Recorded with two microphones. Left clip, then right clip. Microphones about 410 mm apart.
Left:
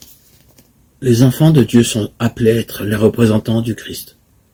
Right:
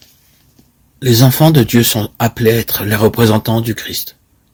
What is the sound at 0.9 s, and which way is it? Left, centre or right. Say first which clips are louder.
Speech: right 2 dB; right.